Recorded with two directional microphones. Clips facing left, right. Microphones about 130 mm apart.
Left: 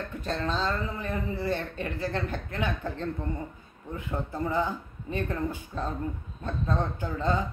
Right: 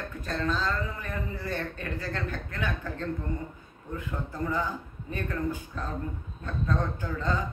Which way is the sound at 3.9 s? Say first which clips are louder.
Left 2 dB; 20° left (ahead or behind).